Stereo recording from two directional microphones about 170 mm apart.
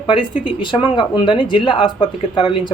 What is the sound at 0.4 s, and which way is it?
Speech, 30° left (ahead or behind).